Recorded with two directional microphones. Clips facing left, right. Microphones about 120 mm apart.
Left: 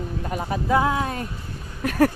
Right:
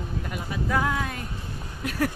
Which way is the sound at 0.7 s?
25° left (ahead or behind).